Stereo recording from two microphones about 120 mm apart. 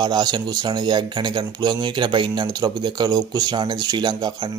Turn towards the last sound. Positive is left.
turn(degrees=-35)  # may be behind; listen again after turning